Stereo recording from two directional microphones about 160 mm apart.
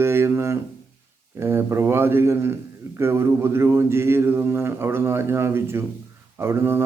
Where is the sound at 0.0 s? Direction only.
15° right (ahead or behind).